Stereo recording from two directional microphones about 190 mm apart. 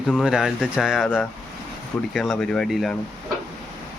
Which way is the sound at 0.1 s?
Centre (ahead or behind).